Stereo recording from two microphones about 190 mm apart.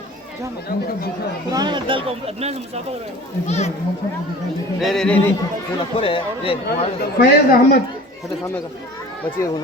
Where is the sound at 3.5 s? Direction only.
35° left (ahead or behind).